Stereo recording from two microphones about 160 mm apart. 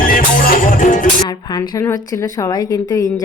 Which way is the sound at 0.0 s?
60° left (ahead or behind).